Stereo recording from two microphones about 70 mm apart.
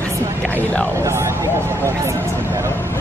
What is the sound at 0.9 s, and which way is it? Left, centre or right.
Speech, right.